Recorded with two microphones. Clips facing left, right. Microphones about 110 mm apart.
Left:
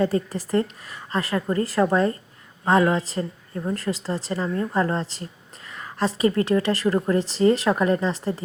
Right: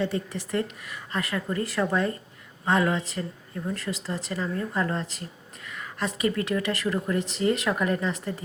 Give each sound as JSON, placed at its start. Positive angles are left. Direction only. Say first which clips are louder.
{"t": 0.0, "sound": "a woman's voice", "louder": "left 6 dB", "side_deg": 40}